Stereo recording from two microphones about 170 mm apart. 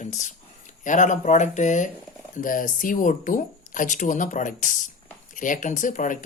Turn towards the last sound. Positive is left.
turn(degrees=50)  # may be behind; listen again after turning